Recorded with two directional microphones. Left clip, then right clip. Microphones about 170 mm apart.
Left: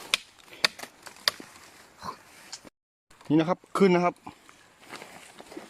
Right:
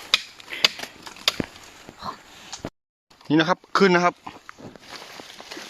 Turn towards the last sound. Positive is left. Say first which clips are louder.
# right 5 dB
turn(degrees=10)  # may be behind; listen again after turning